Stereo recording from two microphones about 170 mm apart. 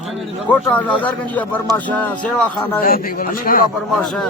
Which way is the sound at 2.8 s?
60° left (ahead or behind).